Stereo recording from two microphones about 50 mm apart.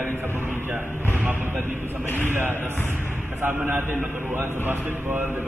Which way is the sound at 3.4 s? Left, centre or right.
Right.